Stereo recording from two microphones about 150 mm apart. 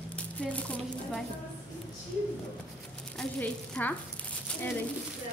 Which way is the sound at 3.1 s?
10° left (ahead or behind).